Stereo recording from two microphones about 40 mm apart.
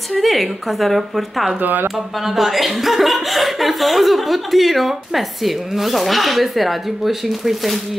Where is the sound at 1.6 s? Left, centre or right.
Right.